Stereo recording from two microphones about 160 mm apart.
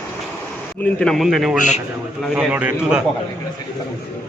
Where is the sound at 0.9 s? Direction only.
5° left (ahead or behind).